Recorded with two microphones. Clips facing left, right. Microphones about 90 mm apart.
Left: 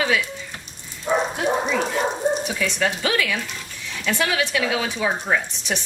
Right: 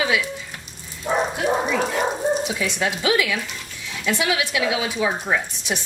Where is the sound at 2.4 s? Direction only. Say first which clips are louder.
Left 1 dB; 20° right (ahead or behind).